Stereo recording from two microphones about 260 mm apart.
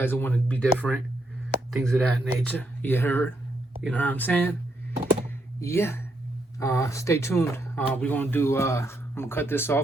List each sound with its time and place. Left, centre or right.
0.0 s speech: centre
5.5 s speech: centre